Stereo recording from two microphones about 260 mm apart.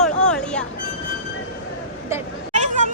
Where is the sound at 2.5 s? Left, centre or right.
Right.